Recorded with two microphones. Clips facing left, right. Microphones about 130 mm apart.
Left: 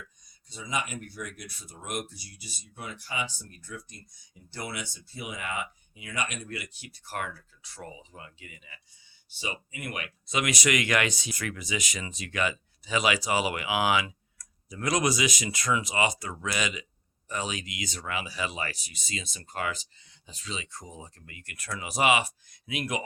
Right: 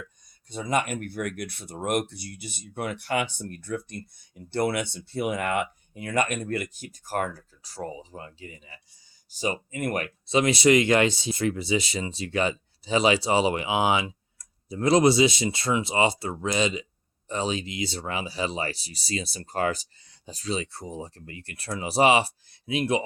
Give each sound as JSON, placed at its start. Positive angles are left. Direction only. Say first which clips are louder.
{"t": 0.5, "sound": "speech", "louder": "right 7 dB", "side_deg": -55}
{"t": 10.2, "sound": "speech", "louder": "right 8 dB", "side_deg": -30}